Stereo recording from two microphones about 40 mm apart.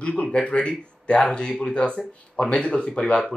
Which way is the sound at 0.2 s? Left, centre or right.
Left.